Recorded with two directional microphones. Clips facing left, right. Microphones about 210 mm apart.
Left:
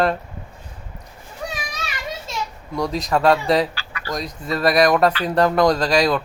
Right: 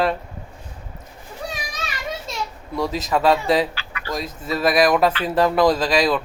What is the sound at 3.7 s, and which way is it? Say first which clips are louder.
Chicken: even; 35° left (ahead or behind).